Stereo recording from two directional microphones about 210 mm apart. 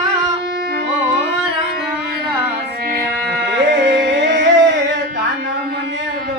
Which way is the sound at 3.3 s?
55° right (ahead or behind).